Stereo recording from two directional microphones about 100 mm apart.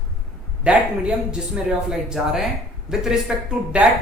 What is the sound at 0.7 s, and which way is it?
Speech, 10° right (ahead or behind).